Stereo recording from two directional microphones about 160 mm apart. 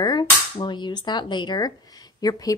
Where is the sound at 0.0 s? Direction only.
25° left (ahead or behind).